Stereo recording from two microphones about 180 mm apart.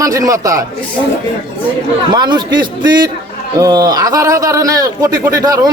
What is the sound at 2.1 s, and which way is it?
A man's voice, 25° right (ahead or behind).